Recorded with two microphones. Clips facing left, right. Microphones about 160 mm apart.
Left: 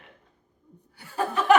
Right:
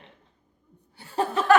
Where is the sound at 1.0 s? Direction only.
30° right (ahead or behind).